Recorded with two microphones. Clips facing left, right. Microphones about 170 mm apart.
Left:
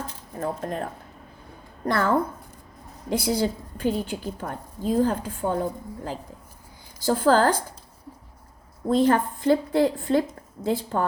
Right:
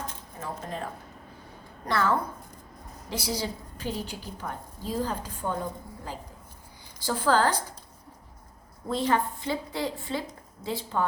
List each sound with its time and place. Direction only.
0.3 s a woman's voice: 55° left (ahead or behind)
1.9 s a woman's voice: 50° left (ahead or behind)
7.0 s a woman's voice: 45° left (ahead or behind)
8.9 s a woman's voice: 50° left (ahead or behind)